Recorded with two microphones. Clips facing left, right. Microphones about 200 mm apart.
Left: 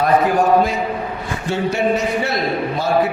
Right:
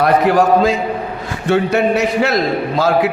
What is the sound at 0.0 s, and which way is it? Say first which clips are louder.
Speech: right 3 dB; 70° right (ahead or behind).